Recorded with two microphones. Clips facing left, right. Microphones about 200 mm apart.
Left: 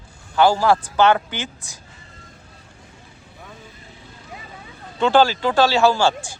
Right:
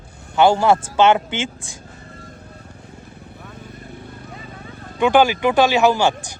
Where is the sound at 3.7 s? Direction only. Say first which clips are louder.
Right 8 dB; 55° right (ahead or behind).